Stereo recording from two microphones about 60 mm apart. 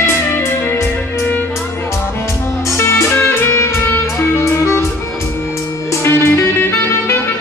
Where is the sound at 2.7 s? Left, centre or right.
Left.